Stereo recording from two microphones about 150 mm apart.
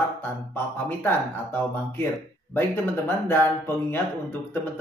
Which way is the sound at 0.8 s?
15° left (ahead or behind).